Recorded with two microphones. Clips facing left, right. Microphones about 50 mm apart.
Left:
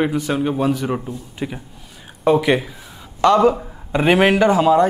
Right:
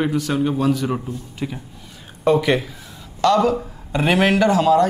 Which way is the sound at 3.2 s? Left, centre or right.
Left.